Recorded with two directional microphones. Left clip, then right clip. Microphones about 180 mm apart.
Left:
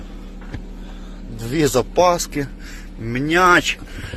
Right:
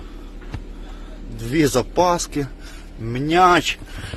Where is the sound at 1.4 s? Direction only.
20° right (ahead or behind).